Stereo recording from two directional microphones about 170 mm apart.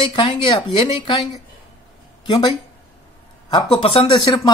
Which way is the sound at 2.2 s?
25° left (ahead or behind).